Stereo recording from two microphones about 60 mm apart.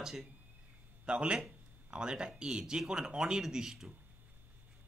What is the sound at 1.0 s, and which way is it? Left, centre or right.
A man's voice, centre.